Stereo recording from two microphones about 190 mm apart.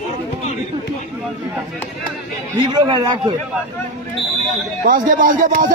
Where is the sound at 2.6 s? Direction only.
25° right (ahead or behind).